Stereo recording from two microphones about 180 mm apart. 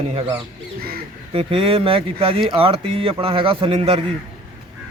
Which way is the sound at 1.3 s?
30° right (ahead or behind).